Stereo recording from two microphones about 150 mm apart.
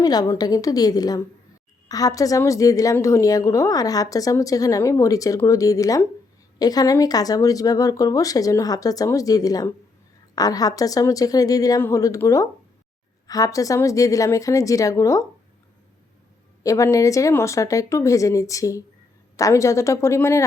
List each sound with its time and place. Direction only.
0.0 s a woman's voice: 25° left (ahead or behind)
16.6 s a woman's voice: 20° left (ahead or behind)